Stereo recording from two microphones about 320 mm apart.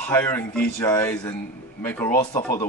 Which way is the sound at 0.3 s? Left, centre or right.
Centre.